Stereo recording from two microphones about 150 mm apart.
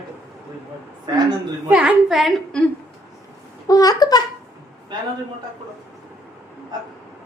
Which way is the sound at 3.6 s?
25° left (ahead or behind).